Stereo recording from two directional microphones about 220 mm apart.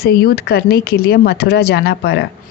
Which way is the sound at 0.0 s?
45° left (ahead or behind).